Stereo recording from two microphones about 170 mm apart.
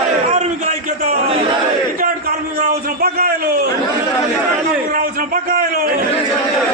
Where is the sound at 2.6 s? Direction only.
65° right (ahead or behind).